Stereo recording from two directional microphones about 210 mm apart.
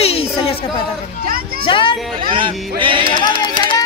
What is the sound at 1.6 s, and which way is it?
Speech, 25° left (ahead or behind).